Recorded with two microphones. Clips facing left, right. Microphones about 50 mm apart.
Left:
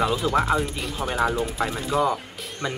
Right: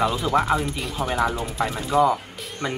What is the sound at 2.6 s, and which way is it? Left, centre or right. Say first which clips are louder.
Speech: right 1 dB; centre.